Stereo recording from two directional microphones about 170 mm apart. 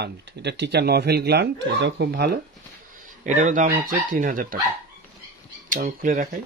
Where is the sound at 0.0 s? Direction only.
85° right; by 2.4 s 70° right (ahead or behind).